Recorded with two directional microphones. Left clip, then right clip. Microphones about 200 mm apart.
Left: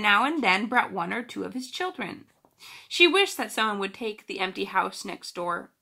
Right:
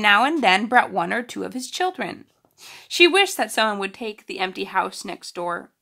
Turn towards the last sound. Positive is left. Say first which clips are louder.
# right 3 dB
turn(degrees=-45)  # may be behind; listen again after turning